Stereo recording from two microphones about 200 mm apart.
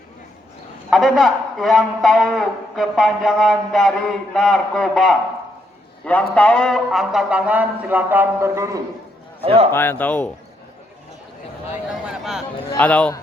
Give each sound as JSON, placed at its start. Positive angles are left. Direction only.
{"t": 0.9, "sound": "a man's voice", "side_deg": 0}
{"t": 6.3, "sound": "speech", "side_deg": 5}
{"t": 9.4, "sound": "a man's voice", "side_deg": -30}
{"t": 9.7, "sound": "speech", "side_deg": 10}
{"t": 11.7, "sound": "a man's voice", "side_deg": -5}